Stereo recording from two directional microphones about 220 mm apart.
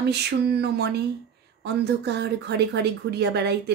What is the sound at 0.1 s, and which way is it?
Speech, 50° right (ahead or behind).